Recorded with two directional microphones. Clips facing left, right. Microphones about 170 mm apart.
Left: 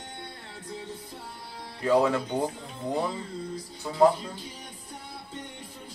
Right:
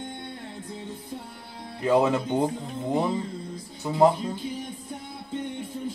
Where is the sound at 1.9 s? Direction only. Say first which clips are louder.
Right 2 dB; 20° right (ahead or behind).